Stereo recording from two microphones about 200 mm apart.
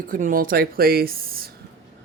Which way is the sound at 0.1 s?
45° right (ahead or behind).